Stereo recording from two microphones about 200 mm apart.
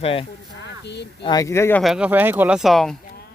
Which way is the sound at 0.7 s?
60° left (ahead or behind).